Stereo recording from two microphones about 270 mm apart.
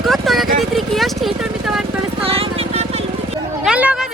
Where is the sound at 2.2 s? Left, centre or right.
Right.